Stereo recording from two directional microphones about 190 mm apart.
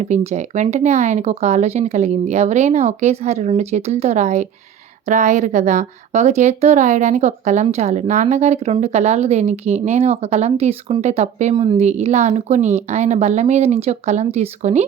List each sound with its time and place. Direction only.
0.0 s speech: 35° right (ahead or behind)
11.5 s speech: 25° right (ahead or behind)